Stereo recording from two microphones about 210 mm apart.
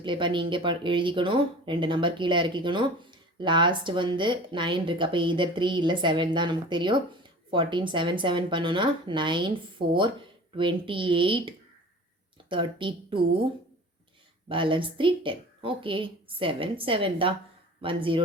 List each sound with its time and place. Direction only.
0.0 s a woman's voice: 25° right (ahead or behind)
14.4 s a woman's voice: 25° right (ahead or behind)